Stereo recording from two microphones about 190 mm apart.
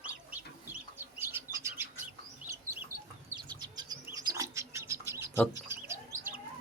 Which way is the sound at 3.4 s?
25° right (ahead or behind).